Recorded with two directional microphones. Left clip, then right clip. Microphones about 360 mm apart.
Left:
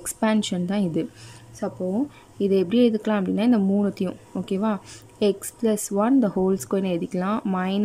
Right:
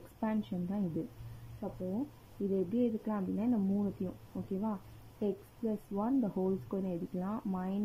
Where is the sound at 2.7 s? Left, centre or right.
Left.